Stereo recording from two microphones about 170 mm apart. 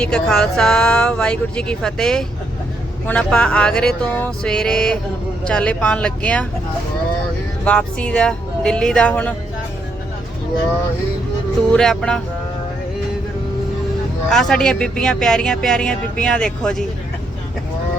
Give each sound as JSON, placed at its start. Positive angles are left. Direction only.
{"t": 0.0, "sound": "speech", "side_deg": 5}
{"t": 7.6, "sound": "speech", "side_deg": 5}
{"t": 11.7, "sound": "speech", "side_deg": 5}
{"t": 14.3, "sound": "speech", "side_deg": 0}